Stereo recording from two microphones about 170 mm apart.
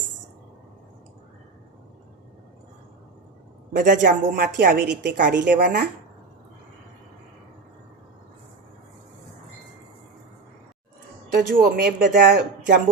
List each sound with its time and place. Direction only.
3.7 s speech: 50° right (ahead or behind)
4.5 s a woman's voice: 75° right (ahead or behind)
5.5 s speech: 50° right (ahead or behind)
11.3 s speech: 55° right (ahead or behind)